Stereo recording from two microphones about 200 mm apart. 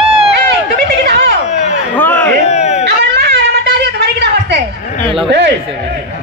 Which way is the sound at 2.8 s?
60° right (ahead or behind).